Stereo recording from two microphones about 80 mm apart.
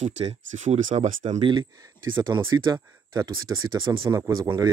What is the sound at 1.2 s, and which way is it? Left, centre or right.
Speech, right.